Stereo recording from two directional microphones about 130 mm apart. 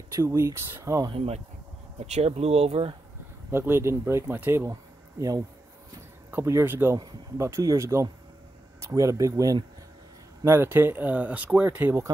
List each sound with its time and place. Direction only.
0.1 s speech: 25° right (ahead or behind)
1.1 s speech: 50° right (ahead or behind)
3.5 s speech: 20° right (ahead or behind)